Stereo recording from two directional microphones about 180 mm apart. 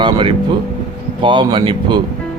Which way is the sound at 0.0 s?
30° right (ahead or behind).